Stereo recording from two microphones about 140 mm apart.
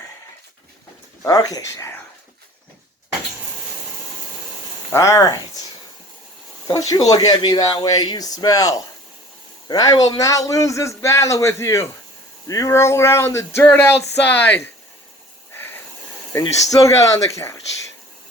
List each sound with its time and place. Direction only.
1.2 s a man's voice: 25° left (ahead or behind)
4.9 s a man's voice: 20° left (ahead or behind)
6.7 s a man's voice: 25° left (ahead or behind)
12.5 s a sound: 25° left (ahead or behind)
15.5 s hiss: 15° left (ahead or behind)
16.4 s a man's voice: 25° left (ahead or behind)